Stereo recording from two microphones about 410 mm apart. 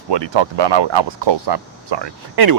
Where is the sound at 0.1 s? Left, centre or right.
Right.